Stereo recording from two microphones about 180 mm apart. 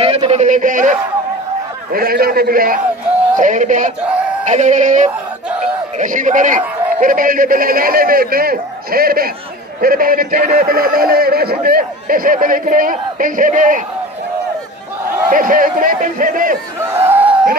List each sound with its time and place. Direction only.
0.0 s a man's voice: 30° right (ahead or behind)
15.2 s a man's voice: 50° right (ahead or behind)
16.9 s a sound: 10° right (ahead or behind)